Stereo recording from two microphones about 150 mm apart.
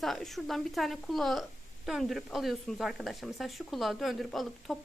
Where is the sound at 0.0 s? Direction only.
Centre (ahead or behind).